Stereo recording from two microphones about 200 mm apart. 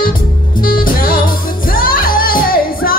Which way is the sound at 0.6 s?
45° left (ahead or behind).